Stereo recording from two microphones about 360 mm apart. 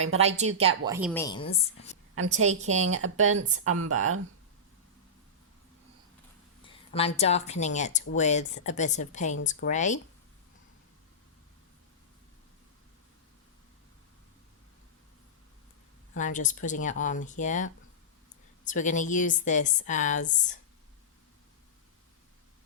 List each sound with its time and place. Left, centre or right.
0.0 s speech: centre
0.9 s speech: centre
1.1 s a woman's voice: centre
2.5 s a woman's voice: centre
2.8 s speech: right
6.9 s a woman's voice: centre
16.1 s a woman's voice: left